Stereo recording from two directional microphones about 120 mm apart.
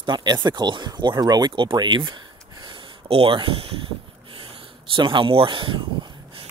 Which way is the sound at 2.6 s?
50° right (ahead or behind).